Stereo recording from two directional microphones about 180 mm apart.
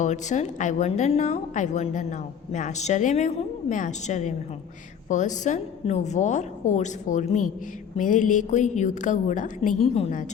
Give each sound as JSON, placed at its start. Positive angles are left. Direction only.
{"t": 0.0, "sound": "a woman's voice", "side_deg": 40}